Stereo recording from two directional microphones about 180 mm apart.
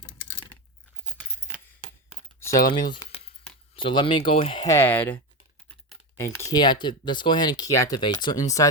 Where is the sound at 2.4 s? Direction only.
15° left (ahead or behind).